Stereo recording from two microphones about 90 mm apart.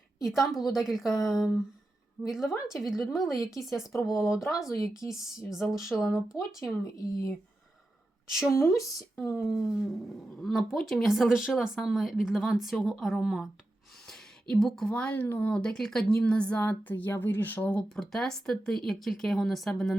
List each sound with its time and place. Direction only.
0.2 s speech: centre (ahead or behind)
4.1 s speech: 30° left (ahead or behind)
5.8 s speech: centre (ahead or behind)
6.8 s speech: 35° left (ahead or behind)
8.3 s speech: 5° right (ahead or behind)
8.5 s speech: 35° left (ahead or behind)
9.1 s speech: 15° left (ahead or behind)
9.4 s a woman's voice: centre (ahead or behind)